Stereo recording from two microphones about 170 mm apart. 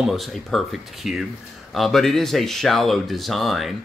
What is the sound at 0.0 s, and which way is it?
Speech, centre (ahead or behind).